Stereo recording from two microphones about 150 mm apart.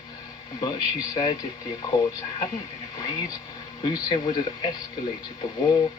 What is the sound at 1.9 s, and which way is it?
Speech, 30° left (ahead or behind).